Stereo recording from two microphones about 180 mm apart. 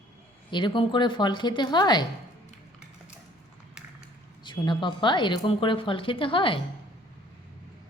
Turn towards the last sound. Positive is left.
turn(degrees=30)  # may be behind; listen again after turning